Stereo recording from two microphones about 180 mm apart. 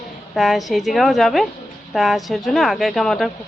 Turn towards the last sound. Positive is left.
turn(degrees=0)  # may be behind; listen again after turning